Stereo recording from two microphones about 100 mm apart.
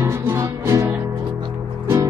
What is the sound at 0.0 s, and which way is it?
Music, 25° right (ahead or behind).